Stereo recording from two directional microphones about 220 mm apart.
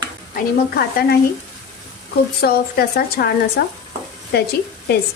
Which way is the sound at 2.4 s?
45° left (ahead or behind).